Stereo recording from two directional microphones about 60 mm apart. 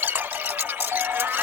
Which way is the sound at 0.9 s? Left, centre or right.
Right.